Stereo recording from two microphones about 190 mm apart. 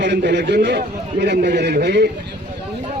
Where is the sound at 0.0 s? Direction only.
65° right (ahead or behind).